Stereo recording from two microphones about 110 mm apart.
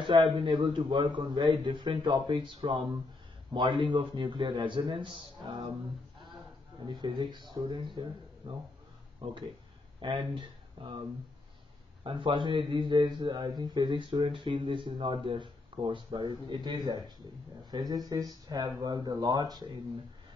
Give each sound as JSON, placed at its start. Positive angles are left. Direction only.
{"t": 0.0, "sound": "a man's voice", "side_deg": -45}
{"t": 6.9, "sound": "a man's voice", "side_deg": -45}
{"t": 9.9, "sound": "speech", "side_deg": -50}
{"t": 12.0, "sound": "a man's voice", "side_deg": -50}